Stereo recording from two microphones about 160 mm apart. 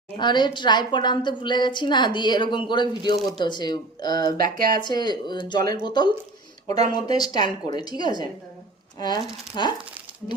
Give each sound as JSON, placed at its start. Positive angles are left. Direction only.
{"t": 0.2, "sound": "a woman's voice", "side_deg": 30}
{"t": 4.4, "sound": "speech", "side_deg": -60}
{"t": 4.8, "sound": "a woman's voice", "side_deg": 25}